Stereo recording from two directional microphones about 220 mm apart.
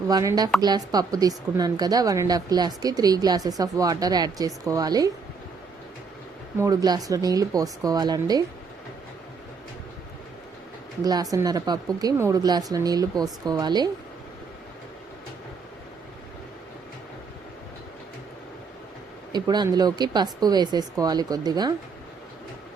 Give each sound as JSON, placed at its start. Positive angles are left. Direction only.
{"t": 0.1, "sound": "speech", "side_deg": -15}
{"t": 6.6, "sound": "speech", "side_deg": -15}
{"t": 11.0, "sound": "speech", "side_deg": -15}
{"t": 19.3, "sound": "speech", "side_deg": -20}